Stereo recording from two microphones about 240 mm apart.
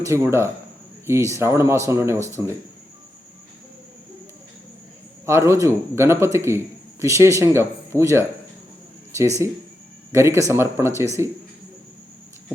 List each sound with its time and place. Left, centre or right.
0.0 s speech: centre
5.2 s speech: centre
10.1 s speech: centre